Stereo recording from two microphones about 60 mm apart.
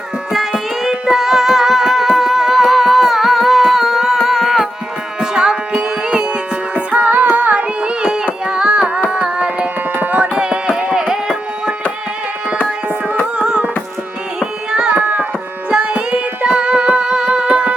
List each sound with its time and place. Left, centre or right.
0.3 s music: centre
9.0 s carnatic music: centre
9.9 s music: right; by 11.7 s centre
13.4 s music: centre
14.3 s carnatic music: centre
15.7 s music: centre